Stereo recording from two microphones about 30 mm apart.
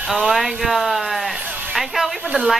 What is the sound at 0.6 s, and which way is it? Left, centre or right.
Speech, centre.